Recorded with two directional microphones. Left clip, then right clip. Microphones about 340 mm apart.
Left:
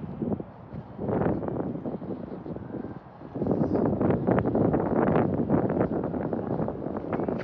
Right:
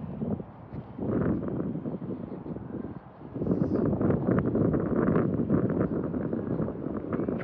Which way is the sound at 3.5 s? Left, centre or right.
Centre.